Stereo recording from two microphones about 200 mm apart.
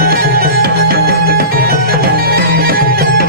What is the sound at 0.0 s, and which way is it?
Music, 50° right (ahead or behind).